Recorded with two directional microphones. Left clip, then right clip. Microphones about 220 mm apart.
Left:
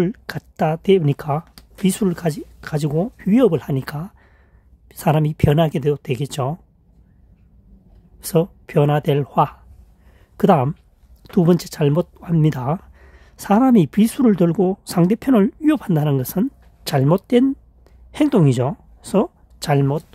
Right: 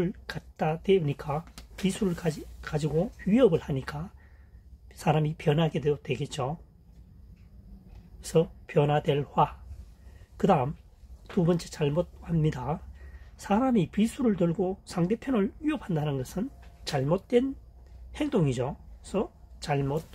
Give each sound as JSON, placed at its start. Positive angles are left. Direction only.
{"t": 0.0, "sound": "speech", "side_deg": 55}
{"t": 8.2, "sound": "speech", "side_deg": 55}